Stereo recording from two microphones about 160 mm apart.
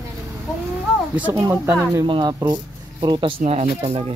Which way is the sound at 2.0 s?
30° right (ahead or behind).